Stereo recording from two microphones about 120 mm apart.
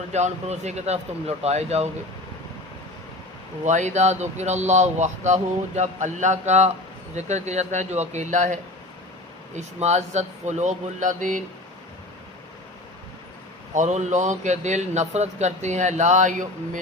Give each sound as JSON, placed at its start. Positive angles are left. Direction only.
{"t": 0.1, "sound": "speech", "side_deg": -70}
{"t": 3.6, "sound": "speech", "side_deg": -80}
{"t": 9.6, "sound": "speech", "side_deg": -75}
{"t": 13.7, "sound": "speech", "side_deg": -80}